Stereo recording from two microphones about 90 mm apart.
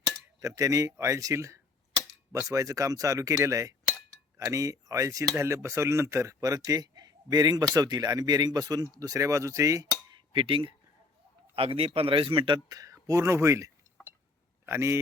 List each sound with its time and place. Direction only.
0.3 s speech: 40° right (ahead or behind)
10.1 s chink: 70° right (ahead or behind)
11.5 s a man's voice: 90° right; by 12.5 s 75° right (ahead or behind)
12.6 s a sound: 45° right (ahead or behind)
14.7 s speech: 30° right (ahead or behind)